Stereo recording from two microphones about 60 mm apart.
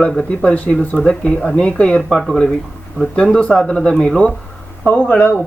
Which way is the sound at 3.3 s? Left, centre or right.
Centre.